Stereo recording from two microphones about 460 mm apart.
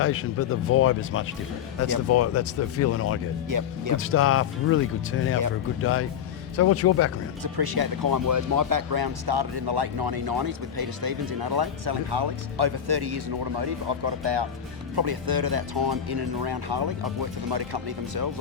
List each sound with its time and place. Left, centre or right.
0.0 s speech: left
3.5 s speech: right
3.9 s speech: left
7.4 s speech: right